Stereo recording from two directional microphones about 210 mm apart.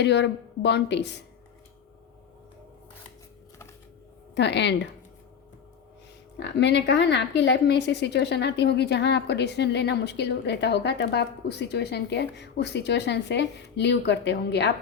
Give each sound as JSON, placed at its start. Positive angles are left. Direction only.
{"t": 0.0, "sound": "a woman's voice", "side_deg": 55}
{"t": 4.4, "sound": "a woman's voice", "side_deg": 55}
{"t": 6.4, "sound": "a woman's voice", "side_deg": 55}